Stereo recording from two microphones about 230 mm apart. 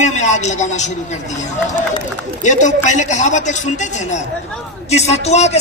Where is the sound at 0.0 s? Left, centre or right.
Left.